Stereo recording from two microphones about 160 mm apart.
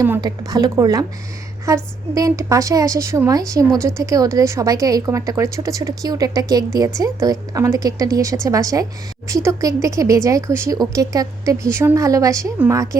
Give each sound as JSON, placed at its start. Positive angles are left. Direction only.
{"t": 0.0, "sound": "speech", "side_deg": -20}